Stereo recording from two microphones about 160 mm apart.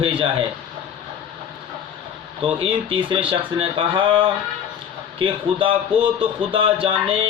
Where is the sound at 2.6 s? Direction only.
35° right (ahead or behind).